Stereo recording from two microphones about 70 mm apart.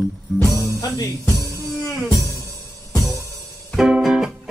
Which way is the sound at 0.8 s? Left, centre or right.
Left.